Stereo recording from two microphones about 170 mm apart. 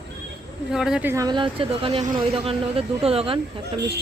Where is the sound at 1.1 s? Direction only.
25° right (ahead or behind).